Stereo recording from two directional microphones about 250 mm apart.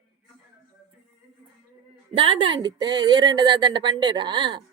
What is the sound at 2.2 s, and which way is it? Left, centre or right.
A woman's voice, right.